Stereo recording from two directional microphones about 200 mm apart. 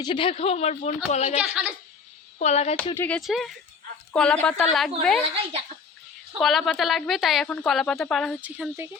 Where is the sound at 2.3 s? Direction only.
35° left (ahead or behind).